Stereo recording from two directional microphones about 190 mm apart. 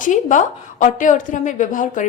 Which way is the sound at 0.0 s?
40° left (ahead or behind).